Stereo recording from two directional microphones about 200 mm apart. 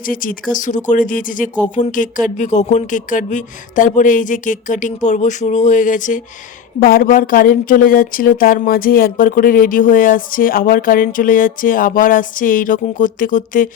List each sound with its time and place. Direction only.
0.0 s speech: 45° left (ahead or behind)